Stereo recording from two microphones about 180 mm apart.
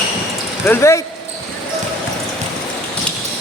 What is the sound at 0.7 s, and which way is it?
Speech, 15° left (ahead or behind).